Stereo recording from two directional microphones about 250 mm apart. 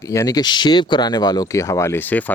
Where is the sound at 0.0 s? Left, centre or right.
Centre.